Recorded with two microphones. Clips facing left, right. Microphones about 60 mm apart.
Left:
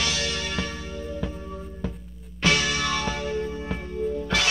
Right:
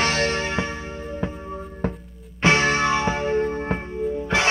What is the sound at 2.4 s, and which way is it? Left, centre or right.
Music, right.